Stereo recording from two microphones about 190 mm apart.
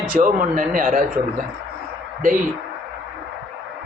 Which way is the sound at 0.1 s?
45° right (ahead or behind).